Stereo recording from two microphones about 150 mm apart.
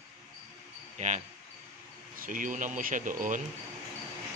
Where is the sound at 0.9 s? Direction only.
50° right (ahead or behind).